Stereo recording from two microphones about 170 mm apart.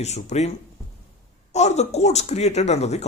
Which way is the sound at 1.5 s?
40° left (ahead or behind).